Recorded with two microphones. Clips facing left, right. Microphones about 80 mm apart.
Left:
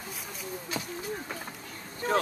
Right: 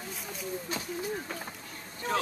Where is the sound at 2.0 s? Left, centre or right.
Left.